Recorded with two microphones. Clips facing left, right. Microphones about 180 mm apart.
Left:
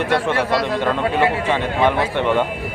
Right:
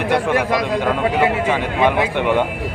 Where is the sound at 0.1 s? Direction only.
15° right (ahead or behind).